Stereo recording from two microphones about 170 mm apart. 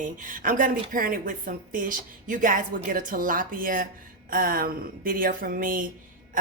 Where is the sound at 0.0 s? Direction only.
50° right (ahead or behind).